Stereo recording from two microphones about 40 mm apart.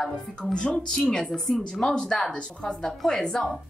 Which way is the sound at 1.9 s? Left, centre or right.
Centre.